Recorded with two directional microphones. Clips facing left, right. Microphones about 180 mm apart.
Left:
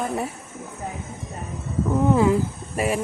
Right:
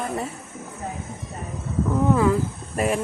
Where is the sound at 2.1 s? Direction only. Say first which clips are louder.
Left 1 dB; 20° left (ahead or behind).